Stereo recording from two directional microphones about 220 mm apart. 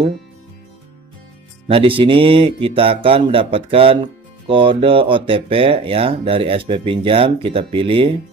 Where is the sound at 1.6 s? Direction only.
25° right (ahead or behind).